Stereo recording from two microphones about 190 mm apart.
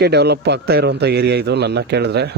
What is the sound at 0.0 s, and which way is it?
A man's voice, 60° right (ahead or behind).